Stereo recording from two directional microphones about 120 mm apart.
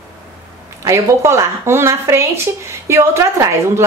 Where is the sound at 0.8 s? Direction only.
25° right (ahead or behind).